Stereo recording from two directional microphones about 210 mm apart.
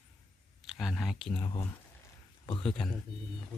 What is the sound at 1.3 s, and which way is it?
Speech, 20° left (ahead or behind).